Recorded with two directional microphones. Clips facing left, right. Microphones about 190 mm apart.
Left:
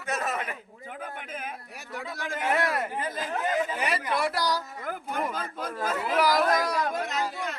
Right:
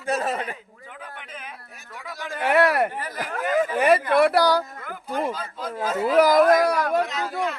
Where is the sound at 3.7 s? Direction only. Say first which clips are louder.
Right 10 dB; 55° right (ahead or behind).